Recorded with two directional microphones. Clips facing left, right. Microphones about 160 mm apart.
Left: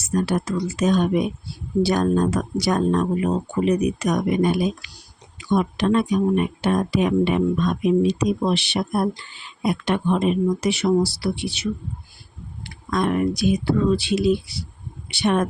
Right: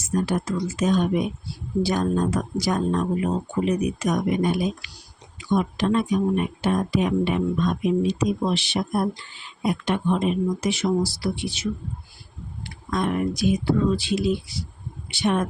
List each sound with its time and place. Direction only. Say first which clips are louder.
0.1 s speech: left 2 dB; 75° left (ahead or behind)
5.5 s speech: left 2 dB; 75° left (ahead or behind)